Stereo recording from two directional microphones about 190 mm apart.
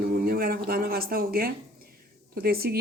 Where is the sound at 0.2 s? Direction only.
50° right (ahead or behind).